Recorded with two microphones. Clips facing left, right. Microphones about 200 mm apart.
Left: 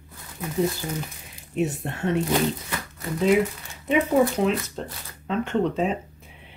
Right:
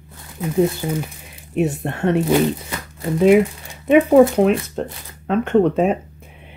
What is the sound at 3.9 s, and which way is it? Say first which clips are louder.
Speech: right 9 dB; 55° right (ahead or behind).